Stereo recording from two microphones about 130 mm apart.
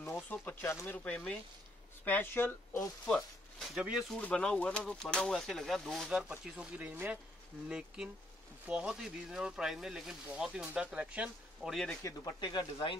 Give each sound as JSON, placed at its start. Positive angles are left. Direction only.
{"t": 0.0, "sound": "speech", "side_deg": 15}
{"t": 3.2, "sound": "speech", "side_deg": 0}
{"t": 4.2, "sound": "speech", "side_deg": 10}
{"t": 11.7, "sound": "speech", "side_deg": 5}
{"t": 12.0, "sound": "speech", "side_deg": 25}